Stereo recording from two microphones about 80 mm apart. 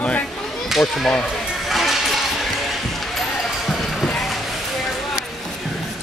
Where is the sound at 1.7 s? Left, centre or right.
Centre.